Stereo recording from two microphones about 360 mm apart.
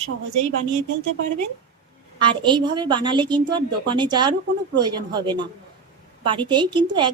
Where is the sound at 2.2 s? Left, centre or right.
Centre.